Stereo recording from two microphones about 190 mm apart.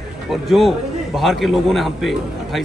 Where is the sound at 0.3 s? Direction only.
Centre (ahead or behind).